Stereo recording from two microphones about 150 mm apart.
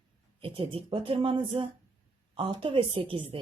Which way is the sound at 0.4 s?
35° right (ahead or behind).